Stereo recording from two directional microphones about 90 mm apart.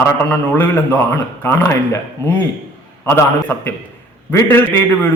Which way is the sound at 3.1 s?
25° left (ahead or behind).